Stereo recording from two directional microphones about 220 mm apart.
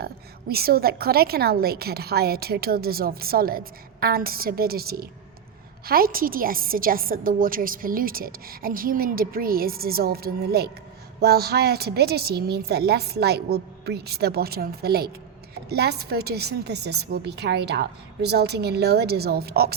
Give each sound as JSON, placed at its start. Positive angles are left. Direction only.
{"t": 0.0, "sound": "a woman's voice", "side_deg": -45}